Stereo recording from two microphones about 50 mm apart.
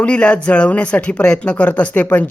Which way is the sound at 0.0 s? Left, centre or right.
Left.